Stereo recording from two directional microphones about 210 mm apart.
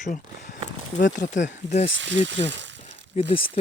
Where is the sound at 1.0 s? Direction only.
55° left (ahead or behind).